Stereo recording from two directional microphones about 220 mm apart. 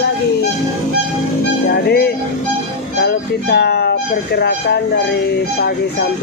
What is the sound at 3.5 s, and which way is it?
Speech, 45° left (ahead or behind).